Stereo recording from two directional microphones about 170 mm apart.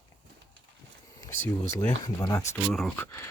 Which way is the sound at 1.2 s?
20° left (ahead or behind).